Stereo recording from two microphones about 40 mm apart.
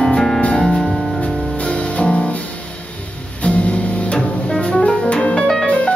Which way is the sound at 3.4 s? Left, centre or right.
Left.